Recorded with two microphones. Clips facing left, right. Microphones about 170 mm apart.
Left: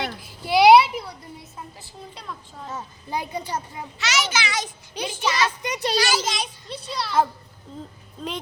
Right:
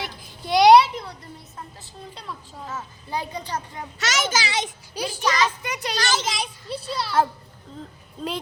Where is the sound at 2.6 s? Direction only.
15° left (ahead or behind).